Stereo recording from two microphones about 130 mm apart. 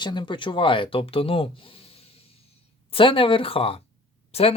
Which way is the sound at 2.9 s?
40° left (ahead or behind).